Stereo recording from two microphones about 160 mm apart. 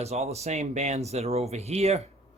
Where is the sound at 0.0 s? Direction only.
40° right (ahead or behind).